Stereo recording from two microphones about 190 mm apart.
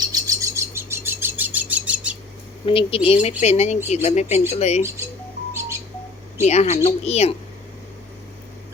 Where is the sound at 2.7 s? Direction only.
30° left (ahead or behind).